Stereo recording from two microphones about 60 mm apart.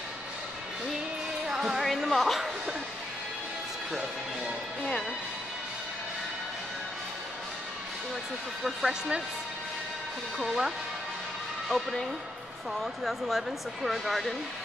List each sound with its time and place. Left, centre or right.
1.5 s music: centre
1.9 s speech: centre
8.6 s speech: centre
10.4 s speech: centre
11.7 s speech: centre